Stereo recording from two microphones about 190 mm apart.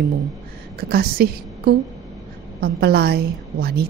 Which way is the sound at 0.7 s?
55° right (ahead or behind).